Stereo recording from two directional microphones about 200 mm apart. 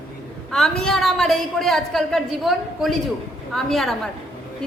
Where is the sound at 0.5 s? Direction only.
Centre (ahead or behind).